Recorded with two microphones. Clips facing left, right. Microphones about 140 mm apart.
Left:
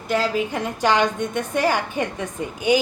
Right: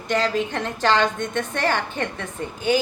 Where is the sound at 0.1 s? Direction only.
5° left (ahead or behind).